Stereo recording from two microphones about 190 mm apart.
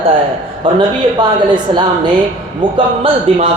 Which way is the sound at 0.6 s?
25° right (ahead or behind).